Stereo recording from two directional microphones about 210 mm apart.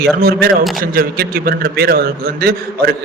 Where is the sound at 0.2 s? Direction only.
45° right (ahead or behind).